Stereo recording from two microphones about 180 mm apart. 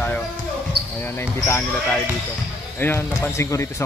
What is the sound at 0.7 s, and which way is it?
Basketball bounce, 60° right (ahead or behind).